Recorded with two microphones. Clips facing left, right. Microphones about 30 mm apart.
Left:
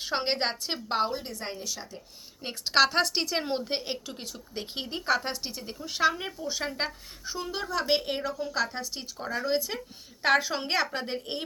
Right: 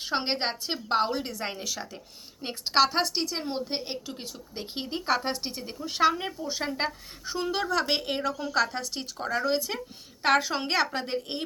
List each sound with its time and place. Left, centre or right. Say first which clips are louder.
0.0 s a woman's voice: even; centre
1.4 s speech: right 3 dB; right
2.4 s a woman's voice: even; centre
3.8 s a woman's voice: even; centre
5.0 s a woman's voice: even; centre
6.1 s a woman's voice: right 1 dB; centre
7.3 s a woman's voice: right 5 dB; right
7.9 s a child's voice: left 1 dB; centre
8.3 s a woman's voice: right 1 dB; right
8.5 s a woman's voice: right 5 dB; right
9.0 s a woman's voice: right 5 dB; right
9.7 s a child's voice: right 2 dB; centre
10.2 s a woman's voice: right 1 dB; right
11.0 s a child's voice: right 2 dB; centre